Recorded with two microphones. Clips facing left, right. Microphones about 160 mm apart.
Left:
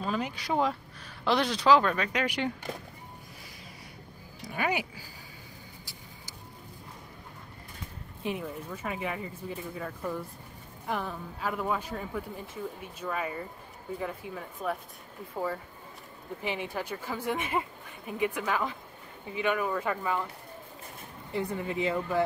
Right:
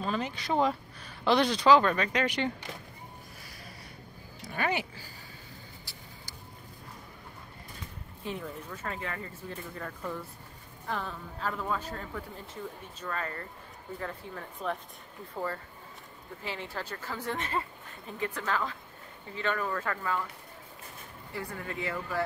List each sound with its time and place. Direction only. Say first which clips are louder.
0.0 s speech: left 1 dB; 10° left (ahead or behind)
4.5 s speech: left 1 dB; 10° left (ahead or behind)
8.2 s speech: left 3 dB; 15° left (ahead or behind)
21.3 s speech: left 6 dB; 20° left (ahead or behind)